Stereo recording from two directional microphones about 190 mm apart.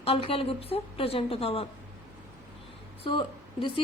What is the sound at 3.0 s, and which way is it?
Speech, 25° left (ahead or behind).